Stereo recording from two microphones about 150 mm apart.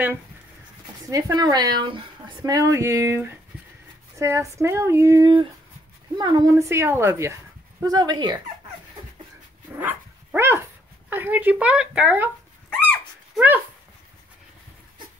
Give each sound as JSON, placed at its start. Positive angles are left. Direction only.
{"t": 1.0, "sound": "speech", "side_deg": -25}
{"t": 9.8, "sound": "dog", "side_deg": -10}
{"t": 11.1, "sound": "speech", "side_deg": -15}
{"t": 12.6, "sound": "a sound", "side_deg": 5}